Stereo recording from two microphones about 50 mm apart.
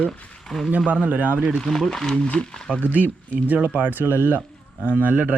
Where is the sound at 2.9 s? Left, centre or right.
Right.